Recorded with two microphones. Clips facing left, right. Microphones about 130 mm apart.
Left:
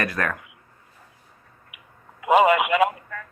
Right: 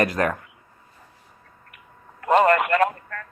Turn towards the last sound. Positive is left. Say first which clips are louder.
# left 1 dB
turn(degrees=5)  # may be behind; listen again after turning